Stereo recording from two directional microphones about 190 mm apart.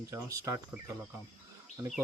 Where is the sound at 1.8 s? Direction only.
10° right (ahead or behind).